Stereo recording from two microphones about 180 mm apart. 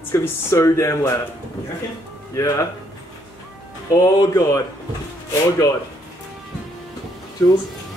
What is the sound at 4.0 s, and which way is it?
Speech, 15° left (ahead or behind).